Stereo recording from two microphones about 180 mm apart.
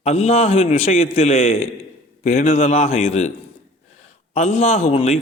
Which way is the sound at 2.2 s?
50° left (ahead or behind).